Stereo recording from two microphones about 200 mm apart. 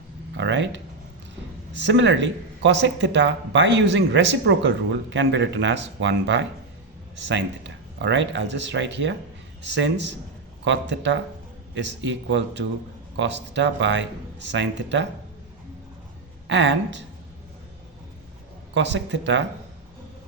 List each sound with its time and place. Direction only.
0.3 s speech: 65° right (ahead or behind)
1.9 s speech: 65° right (ahead or behind)
16.5 s speech: 60° right (ahead or behind)
18.7 s speech: 65° right (ahead or behind)